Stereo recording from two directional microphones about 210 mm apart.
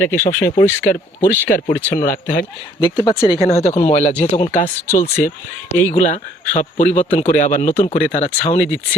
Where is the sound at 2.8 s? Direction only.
25° left (ahead or behind).